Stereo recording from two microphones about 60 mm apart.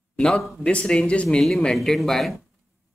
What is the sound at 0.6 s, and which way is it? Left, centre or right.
Speech, centre.